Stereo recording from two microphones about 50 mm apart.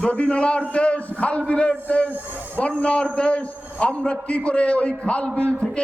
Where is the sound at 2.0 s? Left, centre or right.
Right.